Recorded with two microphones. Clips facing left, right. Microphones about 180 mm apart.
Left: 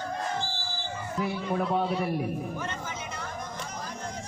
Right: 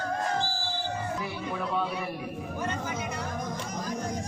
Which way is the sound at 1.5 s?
40° left (ahead or behind).